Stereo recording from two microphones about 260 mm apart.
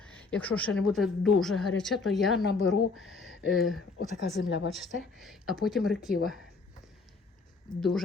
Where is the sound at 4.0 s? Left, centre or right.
Left.